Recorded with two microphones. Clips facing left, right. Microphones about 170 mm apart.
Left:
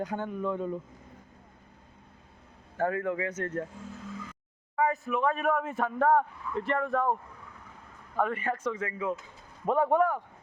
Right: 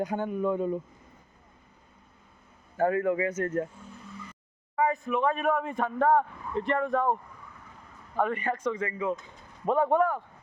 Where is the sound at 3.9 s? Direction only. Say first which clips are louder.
Left 4 dB; 90° left.